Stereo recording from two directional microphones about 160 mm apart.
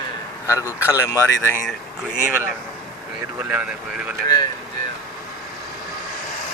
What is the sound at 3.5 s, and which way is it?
Speech, 5° right (ahead or behind).